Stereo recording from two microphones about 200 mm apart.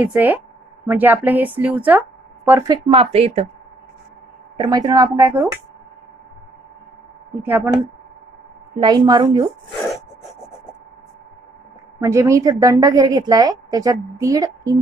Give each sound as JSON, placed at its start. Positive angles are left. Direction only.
{"t": 0.0, "sound": "a woman's voice", "side_deg": -10}
{"t": 2.9, "sound": "a woman's voice", "side_deg": -30}
{"t": 4.6, "sound": "a woman's voice", "side_deg": -20}
{"t": 7.4, "sound": "a woman's voice", "side_deg": -10}
{"t": 8.7, "sound": "a woman's voice", "side_deg": -20}
{"t": 12.0, "sound": "a woman's voice", "side_deg": -15}